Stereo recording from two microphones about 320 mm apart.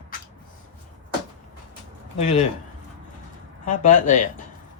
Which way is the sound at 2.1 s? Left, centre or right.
Left.